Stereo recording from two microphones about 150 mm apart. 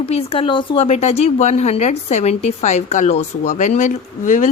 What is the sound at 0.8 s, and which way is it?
Speech, 45° left (ahead or behind).